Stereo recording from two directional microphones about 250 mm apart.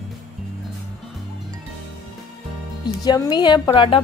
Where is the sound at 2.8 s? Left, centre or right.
Centre.